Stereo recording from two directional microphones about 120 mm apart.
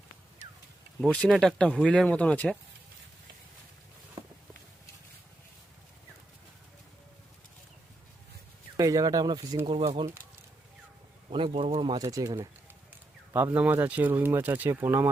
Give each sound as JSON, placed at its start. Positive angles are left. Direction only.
{"t": 1.0, "sound": "speech", "side_deg": 10}
{"t": 8.8, "sound": "speech", "side_deg": -30}
{"t": 9.6, "sound": "speech", "side_deg": -55}
{"t": 11.3, "sound": "speech", "side_deg": -45}
{"t": 12.0, "sound": "speech", "side_deg": -30}
{"t": 13.3, "sound": "speech", "side_deg": -15}